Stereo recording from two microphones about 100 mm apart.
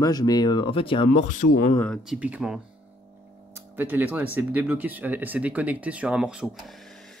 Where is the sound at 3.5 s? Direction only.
20° right (ahead or behind).